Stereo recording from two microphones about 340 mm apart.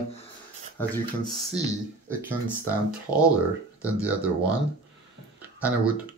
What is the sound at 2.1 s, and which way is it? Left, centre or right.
Speech, centre.